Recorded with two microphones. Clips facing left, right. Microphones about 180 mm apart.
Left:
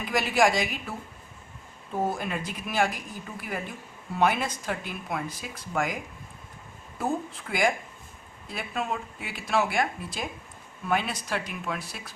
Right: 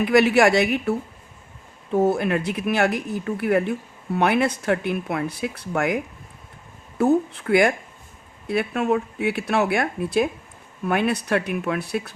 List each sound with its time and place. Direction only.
0.0 s speech: 65° right (ahead or behind)
7.0 s speech: 65° right (ahead or behind)